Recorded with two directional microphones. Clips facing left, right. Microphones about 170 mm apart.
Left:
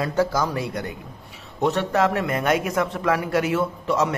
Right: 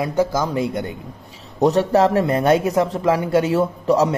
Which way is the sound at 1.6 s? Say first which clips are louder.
Right 5 dB; 35° right (ahead or behind).